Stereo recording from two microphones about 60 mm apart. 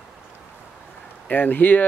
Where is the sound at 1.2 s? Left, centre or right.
Left.